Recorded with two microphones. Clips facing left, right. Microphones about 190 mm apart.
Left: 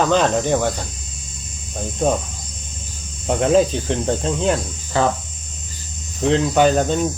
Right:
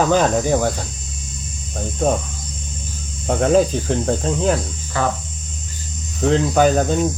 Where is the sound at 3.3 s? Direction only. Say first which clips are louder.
Even; centre (ahead or behind).